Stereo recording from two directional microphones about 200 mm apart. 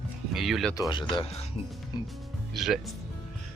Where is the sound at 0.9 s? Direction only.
25° left (ahead or behind).